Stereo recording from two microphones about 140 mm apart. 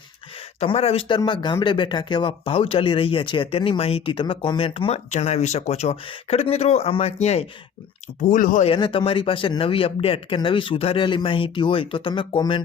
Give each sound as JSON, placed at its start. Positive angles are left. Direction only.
{"t": 0.6, "sound": "speech", "side_deg": 45}
{"t": 5.1, "sound": "speech", "side_deg": 50}
{"t": 8.3, "sound": "speech", "side_deg": 75}
{"t": 8.6, "sound": "speech", "side_deg": 40}